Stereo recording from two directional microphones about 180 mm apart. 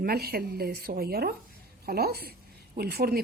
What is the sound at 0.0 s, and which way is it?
A woman's voice, 60° right (ahead or behind).